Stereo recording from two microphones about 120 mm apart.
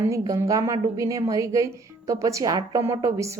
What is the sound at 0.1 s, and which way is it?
A woman's voice, 25° right (ahead or behind).